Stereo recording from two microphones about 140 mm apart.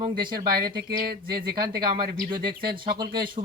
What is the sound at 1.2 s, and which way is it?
Speech, 90° right.